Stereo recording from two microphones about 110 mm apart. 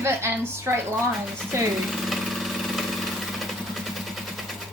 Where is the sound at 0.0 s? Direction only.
25° right (ahead or behind).